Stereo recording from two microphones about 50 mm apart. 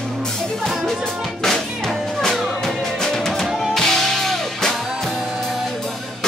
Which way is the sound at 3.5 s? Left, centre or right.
Centre.